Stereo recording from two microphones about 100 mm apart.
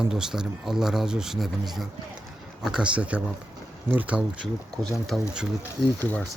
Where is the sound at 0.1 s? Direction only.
5° right (ahead or behind).